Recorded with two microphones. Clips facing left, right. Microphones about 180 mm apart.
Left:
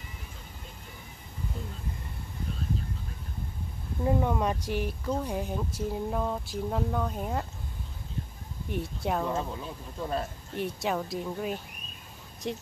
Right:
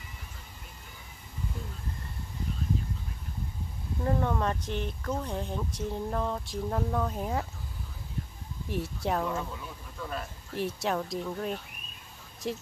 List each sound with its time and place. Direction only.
4.0 s speech: 10° left (ahead or behind)
8.6 s speech: centre (ahead or behind)
9.3 s speech: 25° left (ahead or behind)
10.6 s speech: centre (ahead or behind)